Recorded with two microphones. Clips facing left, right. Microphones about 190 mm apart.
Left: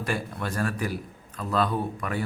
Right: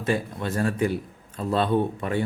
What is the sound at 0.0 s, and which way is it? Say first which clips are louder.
Speech: right 4 dB; 20° right (ahead or behind).